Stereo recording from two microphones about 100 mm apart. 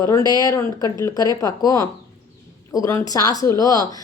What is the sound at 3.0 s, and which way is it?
Speech, 35° left (ahead or behind).